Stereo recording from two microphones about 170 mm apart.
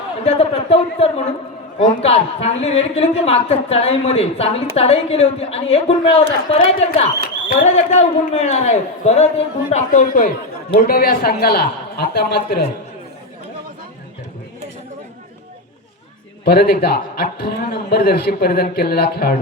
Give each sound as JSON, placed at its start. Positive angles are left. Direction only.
{"t": 0.3, "sound": "a man's voice", "side_deg": 35}
{"t": 16.4, "sound": "a man's voice", "side_deg": 65}